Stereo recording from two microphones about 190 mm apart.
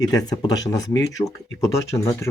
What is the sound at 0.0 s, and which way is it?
Speech, 20° left (ahead or behind).